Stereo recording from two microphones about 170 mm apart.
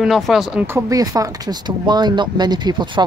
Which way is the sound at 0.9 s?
20° right (ahead or behind).